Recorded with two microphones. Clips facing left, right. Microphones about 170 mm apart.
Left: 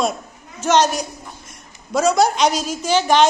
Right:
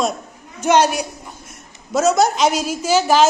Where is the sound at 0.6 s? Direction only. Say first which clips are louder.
Right 1 dB; 10° right (ahead or behind).